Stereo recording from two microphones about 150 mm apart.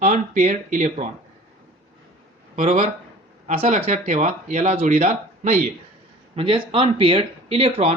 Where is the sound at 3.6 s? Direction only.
45° right (ahead or behind).